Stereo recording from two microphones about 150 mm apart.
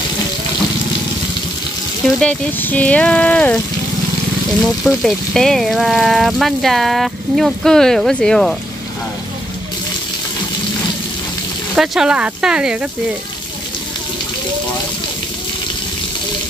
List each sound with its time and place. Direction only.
2.0 s speech: centre (ahead or behind)
2.6 s a sound: 10° left (ahead or behind)
4.8 s speech: centre (ahead or behind)
11.7 s speech: 5° right (ahead or behind)